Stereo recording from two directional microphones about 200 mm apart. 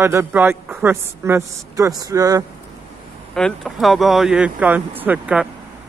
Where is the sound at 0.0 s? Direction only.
10° right (ahead or behind).